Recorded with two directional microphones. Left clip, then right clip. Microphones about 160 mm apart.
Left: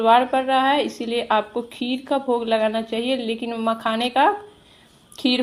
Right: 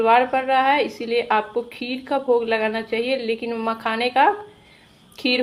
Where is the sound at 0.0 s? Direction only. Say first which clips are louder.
Even; 35° left (ahead or behind).